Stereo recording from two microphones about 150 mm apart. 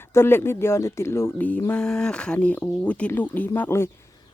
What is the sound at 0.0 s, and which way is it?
Speech, 15° left (ahead or behind).